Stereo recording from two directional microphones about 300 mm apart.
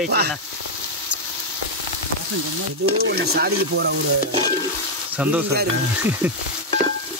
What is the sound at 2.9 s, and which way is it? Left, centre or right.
Speech, right.